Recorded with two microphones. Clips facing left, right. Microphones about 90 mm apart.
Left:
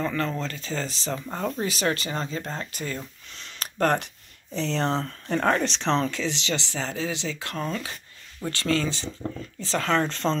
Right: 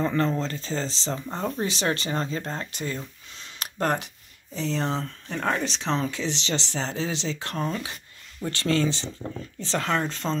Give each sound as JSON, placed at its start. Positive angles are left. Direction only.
{"t": 0.0, "sound": "speech", "side_deg": -25}
{"t": 3.8, "sound": "speech", "side_deg": -10}
{"t": 6.1, "sound": "speech", "side_deg": -25}